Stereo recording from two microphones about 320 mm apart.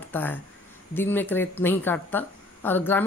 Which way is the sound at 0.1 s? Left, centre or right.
Centre.